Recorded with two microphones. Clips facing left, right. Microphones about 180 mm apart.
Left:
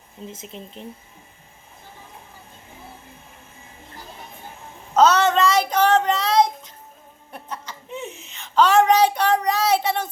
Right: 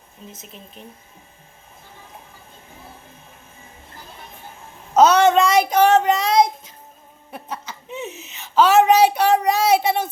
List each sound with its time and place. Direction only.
0.3 s speech: 25° left (ahead or behind)
4.9 s a child's voice: 10° right (ahead or behind)
7.5 s a sound: 5° right (ahead or behind)